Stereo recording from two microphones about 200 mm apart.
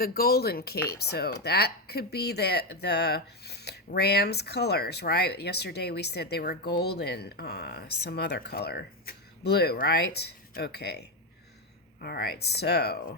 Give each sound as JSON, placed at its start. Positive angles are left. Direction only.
{"t": 0.0, "sound": "speech", "side_deg": 50}